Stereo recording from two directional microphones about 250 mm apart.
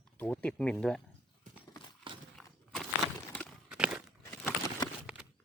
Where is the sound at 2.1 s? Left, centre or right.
Centre.